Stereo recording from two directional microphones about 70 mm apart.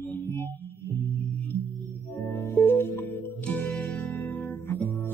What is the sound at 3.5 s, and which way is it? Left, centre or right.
Music, left.